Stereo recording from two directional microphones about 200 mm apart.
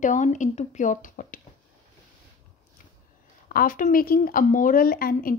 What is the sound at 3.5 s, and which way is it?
A woman's voice, 45° left (ahead or behind).